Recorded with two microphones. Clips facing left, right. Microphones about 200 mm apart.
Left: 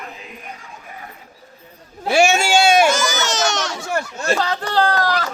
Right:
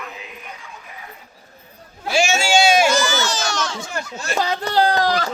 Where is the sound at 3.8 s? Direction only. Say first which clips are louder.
Left 5 dB; 65° left (ahead or behind).